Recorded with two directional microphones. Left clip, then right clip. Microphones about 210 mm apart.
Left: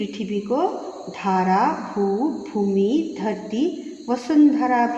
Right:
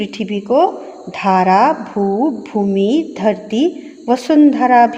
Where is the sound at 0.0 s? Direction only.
30° right (ahead or behind).